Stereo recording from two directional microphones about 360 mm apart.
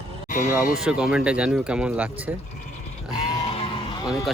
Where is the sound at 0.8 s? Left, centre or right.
Centre.